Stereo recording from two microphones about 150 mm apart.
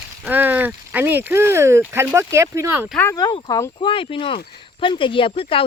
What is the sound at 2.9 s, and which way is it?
Speech, 15° left (ahead or behind).